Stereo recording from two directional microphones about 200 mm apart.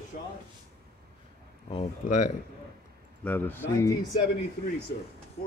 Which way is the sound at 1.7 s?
35° left (ahead or behind).